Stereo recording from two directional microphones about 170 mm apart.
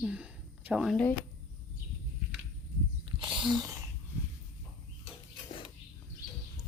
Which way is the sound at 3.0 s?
30° right (ahead or behind).